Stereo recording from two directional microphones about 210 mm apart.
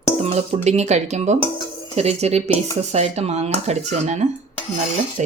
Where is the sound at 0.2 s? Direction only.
30° right (ahead or behind).